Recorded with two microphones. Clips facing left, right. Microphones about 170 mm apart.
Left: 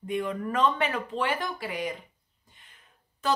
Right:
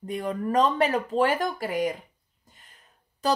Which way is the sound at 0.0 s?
40° right (ahead or behind).